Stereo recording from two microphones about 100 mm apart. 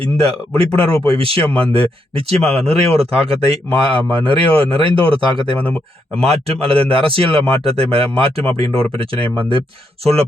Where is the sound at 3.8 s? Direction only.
60° right (ahead or behind).